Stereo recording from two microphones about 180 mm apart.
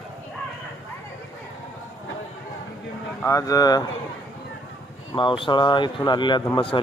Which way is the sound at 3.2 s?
15° left (ahead or behind).